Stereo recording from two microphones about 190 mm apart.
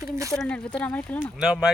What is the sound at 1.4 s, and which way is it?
Speech, 5° right (ahead or behind).